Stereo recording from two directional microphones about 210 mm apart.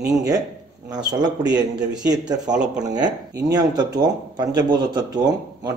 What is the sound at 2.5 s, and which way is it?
Speech, 5° right (ahead or behind).